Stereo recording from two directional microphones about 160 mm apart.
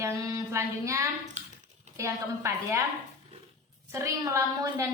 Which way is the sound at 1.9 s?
20° right (ahead or behind).